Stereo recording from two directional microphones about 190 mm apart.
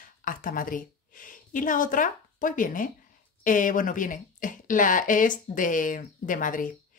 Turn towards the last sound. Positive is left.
turn(degrees=45)  # may be behind; listen again after turning